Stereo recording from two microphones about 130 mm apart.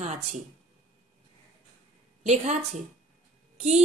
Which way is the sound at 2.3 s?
65° right (ahead or behind).